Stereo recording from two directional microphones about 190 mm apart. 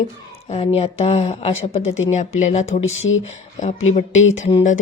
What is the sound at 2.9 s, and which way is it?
Speech, 90° left.